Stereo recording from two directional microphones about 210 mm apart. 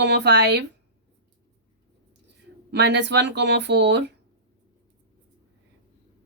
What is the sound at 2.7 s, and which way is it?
Speech, 55° right (ahead or behind).